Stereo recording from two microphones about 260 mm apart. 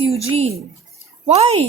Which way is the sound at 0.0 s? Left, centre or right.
Right.